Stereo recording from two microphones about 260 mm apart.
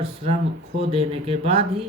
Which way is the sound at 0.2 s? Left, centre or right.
Right.